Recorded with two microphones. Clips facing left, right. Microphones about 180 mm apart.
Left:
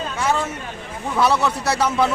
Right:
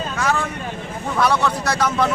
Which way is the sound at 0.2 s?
25° left (ahead or behind).